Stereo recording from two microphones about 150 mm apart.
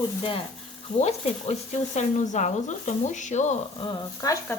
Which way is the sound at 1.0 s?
45° left (ahead or behind).